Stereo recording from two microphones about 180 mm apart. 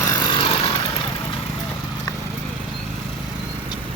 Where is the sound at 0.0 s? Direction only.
20° left (ahead or behind).